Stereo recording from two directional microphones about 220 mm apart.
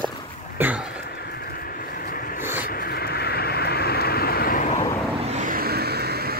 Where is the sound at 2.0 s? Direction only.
40° left (ahead or behind).